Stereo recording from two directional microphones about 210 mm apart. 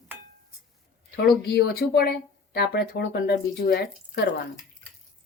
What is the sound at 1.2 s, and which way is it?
Speech, 50° left (ahead or behind).